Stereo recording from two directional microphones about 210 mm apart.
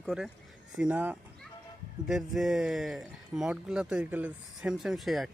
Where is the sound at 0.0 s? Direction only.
Centre (ahead or behind).